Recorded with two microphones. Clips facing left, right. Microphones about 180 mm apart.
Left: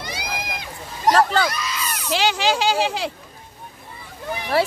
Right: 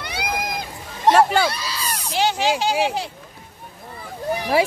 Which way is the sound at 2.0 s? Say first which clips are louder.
Even; 90° left.